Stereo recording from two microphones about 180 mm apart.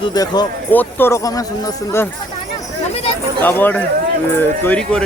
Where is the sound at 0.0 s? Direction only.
20° left (ahead or behind).